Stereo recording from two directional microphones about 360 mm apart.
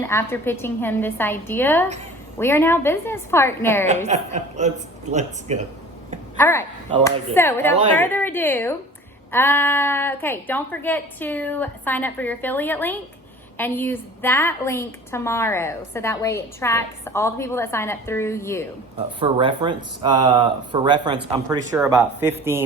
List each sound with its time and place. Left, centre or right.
0.0 s a woman's voice: centre
4.0 s speech: centre
6.3 s a woman's voice: centre
19.2 s speech: centre